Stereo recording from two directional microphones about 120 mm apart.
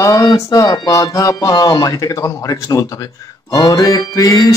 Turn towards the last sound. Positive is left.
turn(degrees=30)  # may be behind; listen again after turning